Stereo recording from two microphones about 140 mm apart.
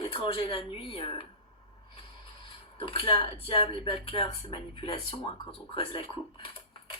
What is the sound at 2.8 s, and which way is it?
Speech, 40° left (ahead or behind).